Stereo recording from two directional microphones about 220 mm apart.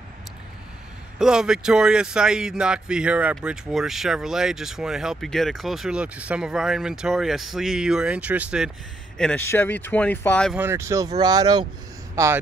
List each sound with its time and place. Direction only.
1.1 s speech: 5° right (ahead or behind)
9.2 s speech: 10° left (ahead or behind)
10.5 s speech: 10° right (ahead or behind)